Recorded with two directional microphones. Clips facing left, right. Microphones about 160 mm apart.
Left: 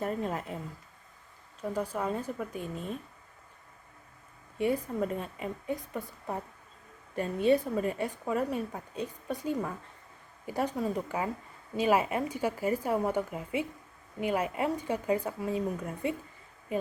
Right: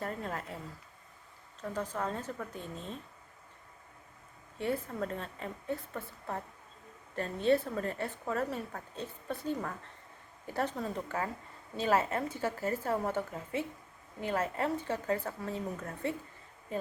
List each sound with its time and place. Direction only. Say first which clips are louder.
0.0 s a woman's voice: left 5 dB; 20° left (ahead or behind)
1.6 s a woman's voice: left 4 dB; 10° left (ahead or behind)
4.5 s a woman's voice: left 5 dB; 15° left (ahead or behind)